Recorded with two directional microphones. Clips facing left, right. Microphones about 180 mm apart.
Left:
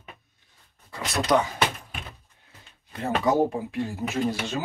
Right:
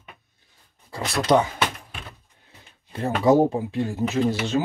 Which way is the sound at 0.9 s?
30° right (ahead or behind).